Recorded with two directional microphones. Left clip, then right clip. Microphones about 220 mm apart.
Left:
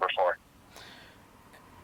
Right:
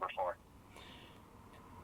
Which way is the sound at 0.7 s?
30° left (ahead or behind).